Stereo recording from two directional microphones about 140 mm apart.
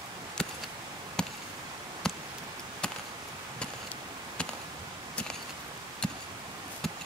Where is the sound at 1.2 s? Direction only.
5° left (ahead or behind).